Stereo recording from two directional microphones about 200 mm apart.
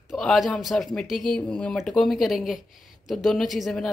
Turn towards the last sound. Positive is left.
turn(degrees=0)  # may be behind; listen again after turning